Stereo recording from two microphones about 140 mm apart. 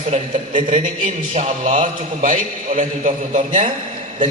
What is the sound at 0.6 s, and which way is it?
A man's voice, 60° right (ahead or behind).